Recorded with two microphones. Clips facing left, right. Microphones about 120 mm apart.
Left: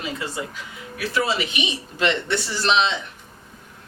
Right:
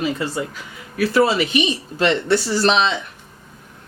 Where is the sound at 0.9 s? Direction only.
45° right (ahead or behind).